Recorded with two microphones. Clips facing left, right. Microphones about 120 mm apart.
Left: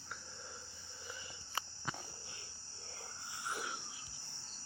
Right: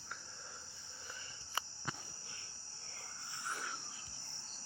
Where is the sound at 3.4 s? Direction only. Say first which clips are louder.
Left 2 dB; 20° left (ahead or behind).